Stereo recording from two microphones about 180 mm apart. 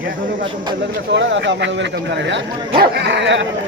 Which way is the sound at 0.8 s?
85° right.